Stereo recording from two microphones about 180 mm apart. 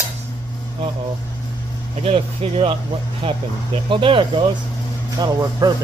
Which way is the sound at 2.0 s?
30° right (ahead or behind).